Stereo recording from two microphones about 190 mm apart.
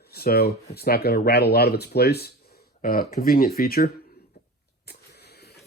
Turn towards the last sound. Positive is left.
turn(degrees=55)  # may be behind; listen again after turning